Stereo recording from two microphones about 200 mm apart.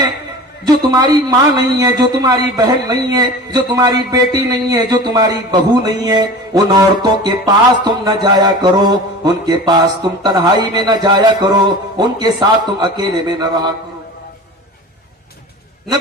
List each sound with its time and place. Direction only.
0.6 s speech: 20° right (ahead or behind)